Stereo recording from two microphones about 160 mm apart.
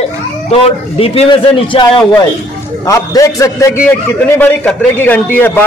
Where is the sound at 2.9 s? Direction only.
20° left (ahead or behind).